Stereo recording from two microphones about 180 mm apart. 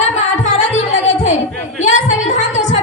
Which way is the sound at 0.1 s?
40° left (ahead or behind).